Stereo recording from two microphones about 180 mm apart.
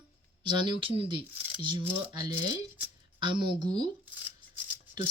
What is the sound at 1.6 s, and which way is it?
Speech, 25° right (ahead or behind).